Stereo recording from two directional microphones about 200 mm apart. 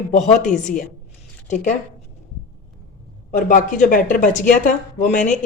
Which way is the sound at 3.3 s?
40° left (ahead or behind).